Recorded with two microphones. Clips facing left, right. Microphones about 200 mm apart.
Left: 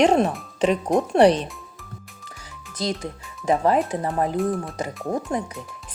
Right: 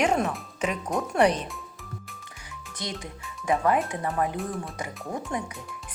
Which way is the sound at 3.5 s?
30° left (ahead or behind).